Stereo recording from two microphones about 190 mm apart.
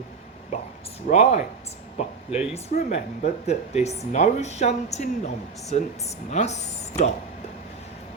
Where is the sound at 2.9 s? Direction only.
35° left (ahead or behind).